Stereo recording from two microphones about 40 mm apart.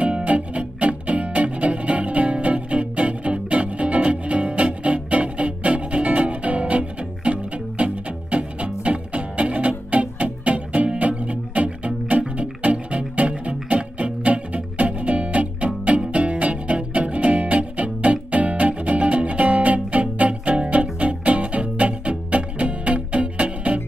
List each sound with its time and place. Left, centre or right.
0.2 s music: right